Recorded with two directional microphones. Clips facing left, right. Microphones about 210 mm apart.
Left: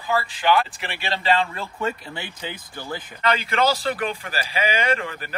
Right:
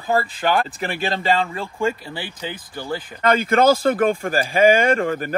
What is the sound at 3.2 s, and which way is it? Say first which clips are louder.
Speech: right 6 dB; 45° right (ahead or behind).